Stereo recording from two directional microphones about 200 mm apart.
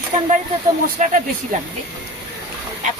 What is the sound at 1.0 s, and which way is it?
Speech, 40° right (ahead or behind).